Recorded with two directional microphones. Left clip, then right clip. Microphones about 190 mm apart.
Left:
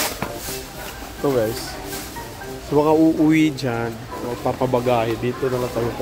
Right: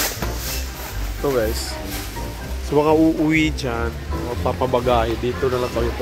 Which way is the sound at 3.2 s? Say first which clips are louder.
Left 1 dB; 20° left (ahead or behind).